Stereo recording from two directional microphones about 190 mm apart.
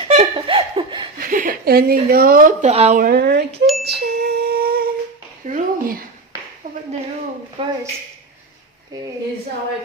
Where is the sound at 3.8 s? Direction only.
55° right (ahead or behind).